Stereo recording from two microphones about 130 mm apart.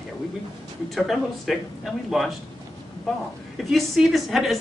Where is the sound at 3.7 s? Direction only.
Centre (ahead or behind).